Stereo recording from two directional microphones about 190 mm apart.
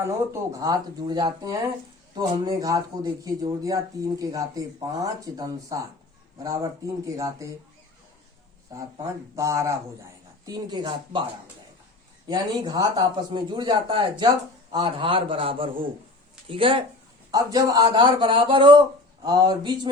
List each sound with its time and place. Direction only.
0.0 s a man's voice: 15° right (ahead or behind)
8.7 s speech: 15° right (ahead or behind)
12.3 s a man's voice: 20° right (ahead or behind)